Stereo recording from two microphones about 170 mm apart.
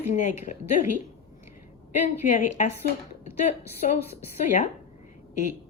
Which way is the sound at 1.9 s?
45° left (ahead or behind).